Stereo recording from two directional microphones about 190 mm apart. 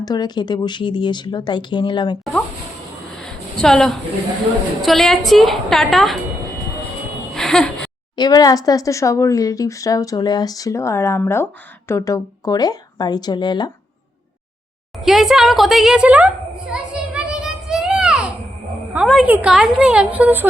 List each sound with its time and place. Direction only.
0.0 s speech: 20° left (ahead or behind)
3.2 s a sound: centre (ahead or behind)
4.8 s a woman's voice: centre (ahead or behind)
7.3 s a sound: centre (ahead or behind)
8.1 s speech: 20° left (ahead or behind)
14.9 s a woman's voice: centre (ahead or behind)
17.4 s child singing: 5° right (ahead or behind)
18.9 s a woman's voice: 5° right (ahead or behind)